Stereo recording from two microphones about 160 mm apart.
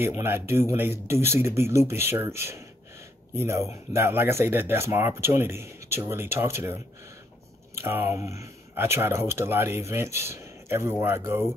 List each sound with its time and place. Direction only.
0.2 s speech: 15° right (ahead or behind)